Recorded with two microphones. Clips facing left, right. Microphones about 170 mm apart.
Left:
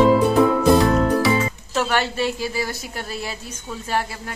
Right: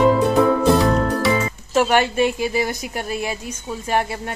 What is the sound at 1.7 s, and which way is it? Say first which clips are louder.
A woman's voice: right 5 dB; 15° right (ahead or behind).